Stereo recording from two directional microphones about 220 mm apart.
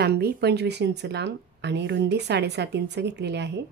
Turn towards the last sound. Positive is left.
turn(degrees=-50)  # may be behind; listen again after turning